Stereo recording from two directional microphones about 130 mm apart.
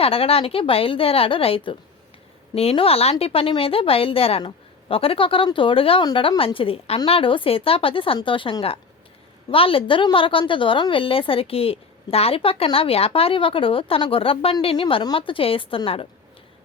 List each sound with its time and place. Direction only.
0.0 s a woman's voice: 45° left (ahead or behind)